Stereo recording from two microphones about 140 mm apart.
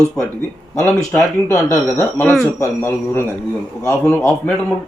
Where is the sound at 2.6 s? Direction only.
20° left (ahead or behind).